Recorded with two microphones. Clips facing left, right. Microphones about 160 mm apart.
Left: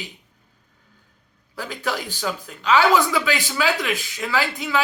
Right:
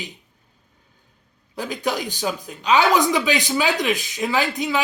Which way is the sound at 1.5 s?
20° right (ahead or behind).